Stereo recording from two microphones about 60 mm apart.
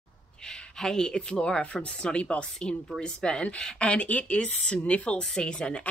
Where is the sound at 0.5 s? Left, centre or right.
Centre.